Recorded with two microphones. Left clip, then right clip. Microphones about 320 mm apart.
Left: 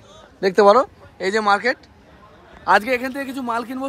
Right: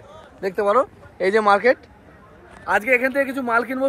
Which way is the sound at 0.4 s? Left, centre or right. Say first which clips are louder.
Left 5 dB; left.